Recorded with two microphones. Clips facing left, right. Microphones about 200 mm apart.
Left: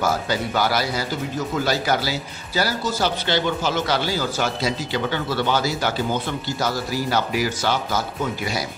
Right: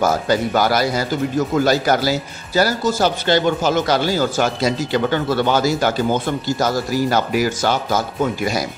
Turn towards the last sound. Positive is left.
turn(degrees=-45)  # may be behind; listen again after turning